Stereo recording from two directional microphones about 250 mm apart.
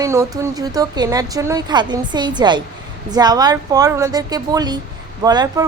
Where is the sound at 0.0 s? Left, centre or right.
Centre.